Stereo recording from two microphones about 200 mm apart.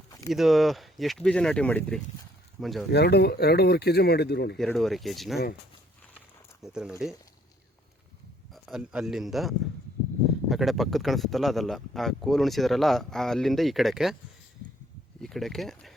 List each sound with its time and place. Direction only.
0.1 s a sound: 15° left (ahead or behind)
0.3 s speech: centre (ahead or behind)
2.9 s speech: 55° left (ahead or behind)
4.5 s speech: centre (ahead or behind)
6.6 s speech: 5° right (ahead or behind)
8.5 s speech: centre (ahead or behind)
15.2 s speech: centre (ahead or behind)